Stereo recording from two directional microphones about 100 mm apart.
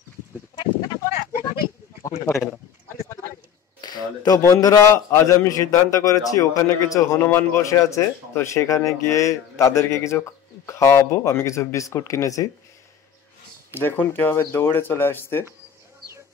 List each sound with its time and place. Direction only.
2.2 s speech: 30° left (ahead or behind)
3.8 s a sound: 45° left (ahead or behind)
4.4 s speech: 35° left (ahead or behind)
7.2 s speech: 25° left (ahead or behind)
13.7 s speech: 20° left (ahead or behind)